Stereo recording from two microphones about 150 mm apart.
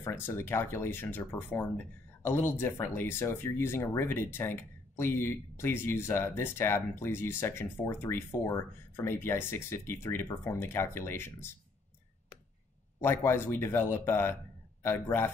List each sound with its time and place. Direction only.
0.0 s speech: 15° left (ahead or behind)
13.0 s speech: 15° left (ahead or behind)